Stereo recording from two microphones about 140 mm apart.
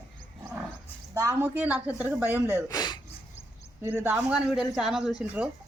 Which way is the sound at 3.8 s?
15° right (ahead or behind).